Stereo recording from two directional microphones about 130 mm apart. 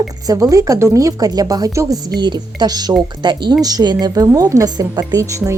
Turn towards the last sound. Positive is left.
turn(degrees=-25)  # may be behind; listen again after turning